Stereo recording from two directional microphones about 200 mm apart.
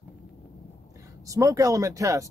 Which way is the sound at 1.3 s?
15° right (ahead or behind).